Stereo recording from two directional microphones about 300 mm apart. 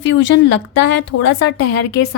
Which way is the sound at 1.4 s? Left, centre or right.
Left.